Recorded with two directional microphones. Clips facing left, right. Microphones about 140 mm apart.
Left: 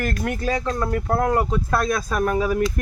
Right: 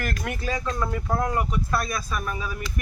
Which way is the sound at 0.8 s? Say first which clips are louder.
Left 7 dB; 50° left (ahead or behind).